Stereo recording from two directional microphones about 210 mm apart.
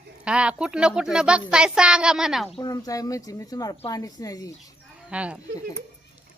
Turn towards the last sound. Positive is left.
turn(degrees=-5)  # may be behind; listen again after turning